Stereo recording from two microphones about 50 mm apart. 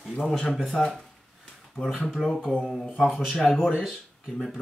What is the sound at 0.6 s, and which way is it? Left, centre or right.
Speech, centre.